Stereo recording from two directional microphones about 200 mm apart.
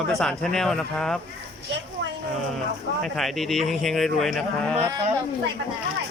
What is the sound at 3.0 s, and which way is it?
Speech, centre (ahead or behind).